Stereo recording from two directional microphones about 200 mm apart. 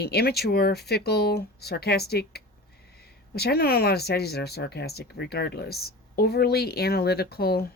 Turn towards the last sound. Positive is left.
turn(degrees=50)  # may be behind; listen again after turning